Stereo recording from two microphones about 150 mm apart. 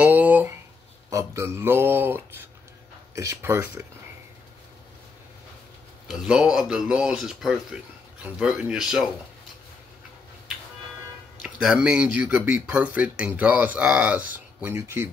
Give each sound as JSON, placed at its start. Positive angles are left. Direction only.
{"t": 0.0, "sound": "a sound", "side_deg": -10}
{"t": 1.1, "sound": "speech", "side_deg": -20}
{"t": 6.0, "sound": "speech", "side_deg": -5}
{"t": 11.4, "sound": "speech", "side_deg": -5}